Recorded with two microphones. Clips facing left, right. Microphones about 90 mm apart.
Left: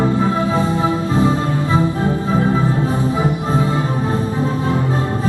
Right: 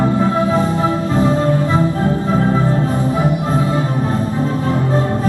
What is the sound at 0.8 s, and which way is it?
Music, 20° left (ahead or behind).